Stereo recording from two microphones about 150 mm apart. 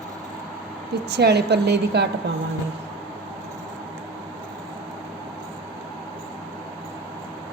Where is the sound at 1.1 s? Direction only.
90° right.